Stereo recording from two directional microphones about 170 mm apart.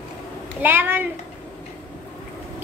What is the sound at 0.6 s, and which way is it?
Speech, 10° right (ahead or behind).